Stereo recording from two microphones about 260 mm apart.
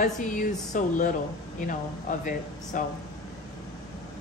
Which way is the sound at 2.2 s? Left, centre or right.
Left.